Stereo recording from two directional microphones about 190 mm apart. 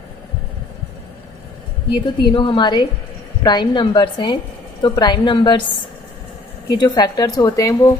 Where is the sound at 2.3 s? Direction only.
25° left (ahead or behind).